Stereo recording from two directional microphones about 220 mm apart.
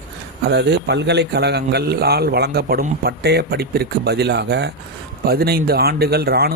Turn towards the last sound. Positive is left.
turn(degrees=-45)  # may be behind; listen again after turning